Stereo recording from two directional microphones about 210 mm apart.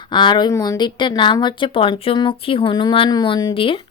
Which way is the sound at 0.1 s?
20° left (ahead or behind).